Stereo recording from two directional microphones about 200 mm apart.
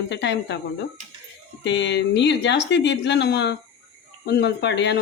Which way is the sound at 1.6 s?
65° left (ahead or behind).